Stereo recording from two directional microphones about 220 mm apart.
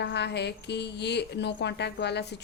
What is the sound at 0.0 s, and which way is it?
A woman's voice, 50° left (ahead or behind).